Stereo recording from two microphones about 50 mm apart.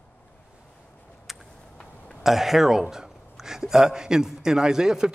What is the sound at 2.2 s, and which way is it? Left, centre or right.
Speech, centre.